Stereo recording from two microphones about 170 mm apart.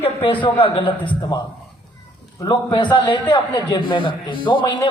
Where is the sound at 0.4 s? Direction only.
30° left (ahead or behind).